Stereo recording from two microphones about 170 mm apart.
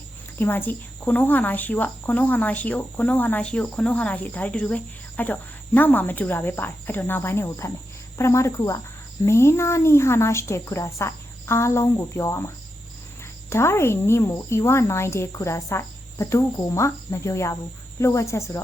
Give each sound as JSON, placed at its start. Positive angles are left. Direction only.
{"t": 0.3, "sound": "speech", "side_deg": 10}
{"t": 13.5, "sound": "speech", "side_deg": 15}